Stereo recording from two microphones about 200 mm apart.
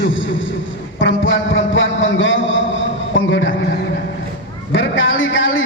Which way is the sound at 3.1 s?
65° left (ahead or behind).